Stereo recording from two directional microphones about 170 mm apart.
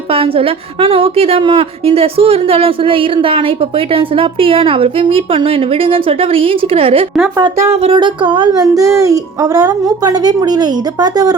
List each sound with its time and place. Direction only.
0.1 s a woman's voice: 35° right (ahead or behind)
7.3 s speech: 20° right (ahead or behind)
7.8 s speech: 30° right (ahead or behind)